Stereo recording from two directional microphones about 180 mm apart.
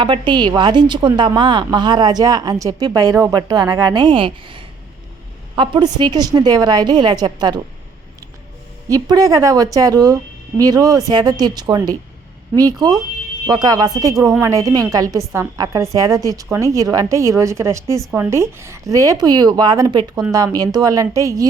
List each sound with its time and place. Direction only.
0.0 s a woman's voice: 25° right (ahead or behind)
8.9 s a woman's voice: 20° right (ahead or behind)